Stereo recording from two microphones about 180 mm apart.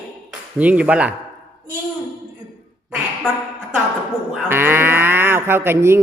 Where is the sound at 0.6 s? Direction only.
5° right (ahead or behind).